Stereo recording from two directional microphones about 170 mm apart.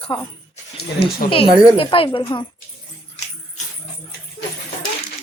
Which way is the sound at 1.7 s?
30° left (ahead or behind).